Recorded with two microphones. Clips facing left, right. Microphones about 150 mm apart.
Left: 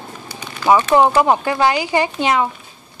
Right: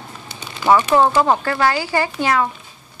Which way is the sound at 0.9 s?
15° left (ahead or behind).